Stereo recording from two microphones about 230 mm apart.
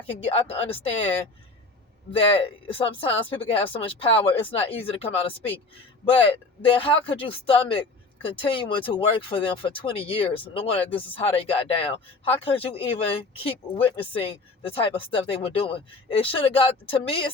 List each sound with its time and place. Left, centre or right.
0.0 s speech: left
2.1 s speech: left